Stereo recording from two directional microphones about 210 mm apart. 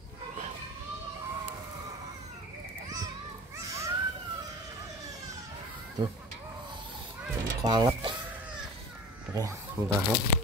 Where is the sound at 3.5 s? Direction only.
15° right (ahead or behind).